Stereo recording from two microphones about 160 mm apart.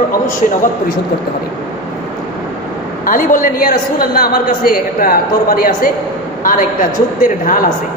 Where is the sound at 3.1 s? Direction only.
55° left (ahead or behind).